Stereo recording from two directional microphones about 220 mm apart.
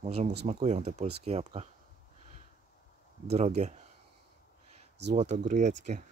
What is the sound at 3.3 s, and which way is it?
Speech, 30° right (ahead or behind).